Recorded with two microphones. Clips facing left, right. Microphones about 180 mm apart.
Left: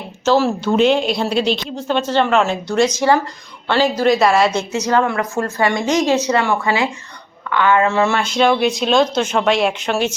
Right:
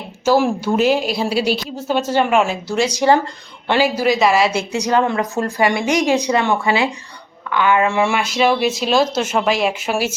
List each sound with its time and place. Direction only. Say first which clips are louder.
0.3 s a woman's voice: even; 10° right (ahead or behind)
2.9 s a woman's voice: right 1 dB; 15° right (ahead or behind)
4.7 s a woman's voice: even; 15° right (ahead or behind)